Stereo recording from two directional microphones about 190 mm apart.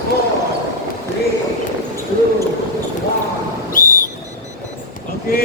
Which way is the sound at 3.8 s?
45° left (ahead or behind).